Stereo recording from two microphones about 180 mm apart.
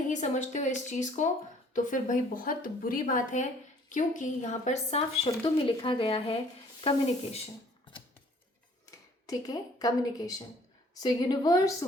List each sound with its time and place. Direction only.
0.1 s a woman's voice: 40° left (ahead or behind)
8.9 s a woman's voice: 20° left (ahead or behind)